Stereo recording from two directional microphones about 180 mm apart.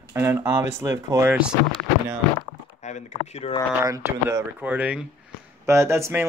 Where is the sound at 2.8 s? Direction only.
40° left (ahead or behind).